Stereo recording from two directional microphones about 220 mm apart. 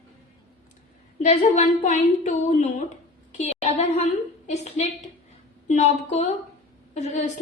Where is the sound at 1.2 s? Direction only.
35° left (ahead or behind).